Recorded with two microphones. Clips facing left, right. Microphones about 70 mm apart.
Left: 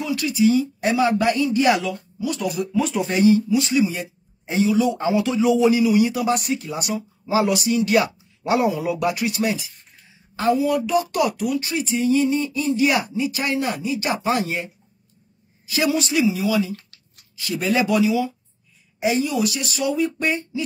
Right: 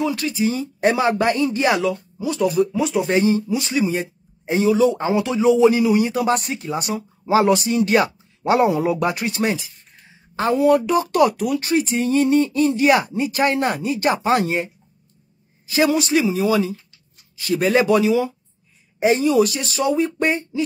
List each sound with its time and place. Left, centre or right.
0.0 s a woman's voice: right
10.5 s speech: right
11.0 s speech: right
17.4 s speech: right